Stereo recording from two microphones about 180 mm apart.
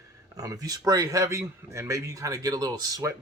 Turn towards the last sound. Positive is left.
turn(degrees=-20)  # may be behind; listen again after turning